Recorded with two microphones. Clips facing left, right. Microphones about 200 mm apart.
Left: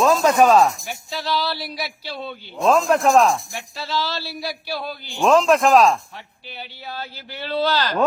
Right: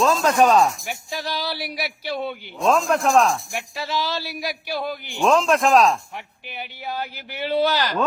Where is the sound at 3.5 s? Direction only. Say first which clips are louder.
Even; 15° right (ahead or behind).